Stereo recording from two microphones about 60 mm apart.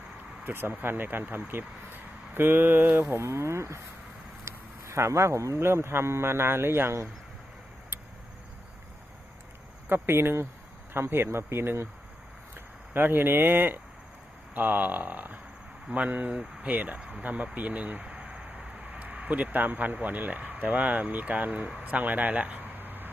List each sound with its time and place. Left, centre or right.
0.4 s speech: right
3.1 s speech: right
9.9 s speech: right
21.6 s speech: centre
21.8 s a sound: right